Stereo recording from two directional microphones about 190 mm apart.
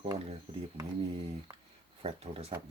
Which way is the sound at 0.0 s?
30° right (ahead or behind).